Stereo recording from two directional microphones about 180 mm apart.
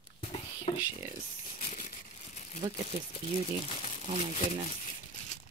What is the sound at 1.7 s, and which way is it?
Crumpling, 40° left (ahead or behind).